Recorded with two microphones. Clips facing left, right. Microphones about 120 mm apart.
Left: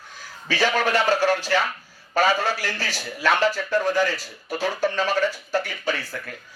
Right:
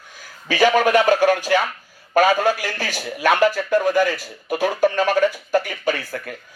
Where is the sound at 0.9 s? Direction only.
50° right (ahead or behind).